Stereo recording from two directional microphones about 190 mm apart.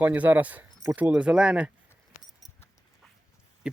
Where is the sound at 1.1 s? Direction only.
5° right (ahead or behind).